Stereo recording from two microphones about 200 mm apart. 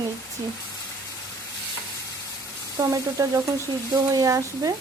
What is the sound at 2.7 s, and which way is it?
Frying, 15° right (ahead or behind).